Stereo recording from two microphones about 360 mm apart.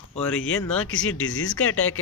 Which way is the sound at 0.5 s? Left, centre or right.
Centre.